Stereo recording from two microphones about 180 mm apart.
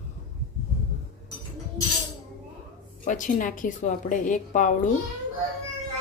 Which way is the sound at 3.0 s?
45° left (ahead or behind).